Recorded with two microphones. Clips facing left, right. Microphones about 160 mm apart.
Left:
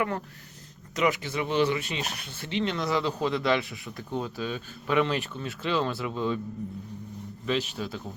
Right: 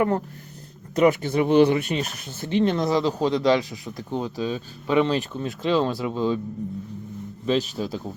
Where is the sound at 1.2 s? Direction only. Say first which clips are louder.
Right 8 dB; 50° right (ahead or behind); by 6.4 s 30° right (ahead or behind).